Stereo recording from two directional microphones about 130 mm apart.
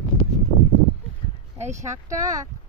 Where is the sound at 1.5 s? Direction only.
60° right (ahead or behind).